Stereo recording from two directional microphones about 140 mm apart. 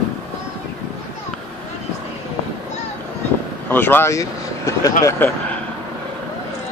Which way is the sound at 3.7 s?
15° left (ahead or behind).